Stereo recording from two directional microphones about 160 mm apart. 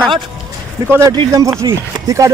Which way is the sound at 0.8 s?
15° right (ahead or behind).